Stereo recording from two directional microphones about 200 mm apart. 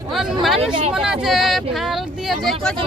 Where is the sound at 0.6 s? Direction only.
30° right (ahead or behind).